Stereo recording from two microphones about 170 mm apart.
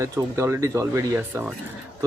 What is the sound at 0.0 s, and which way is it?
Speech, 15° right (ahead or behind).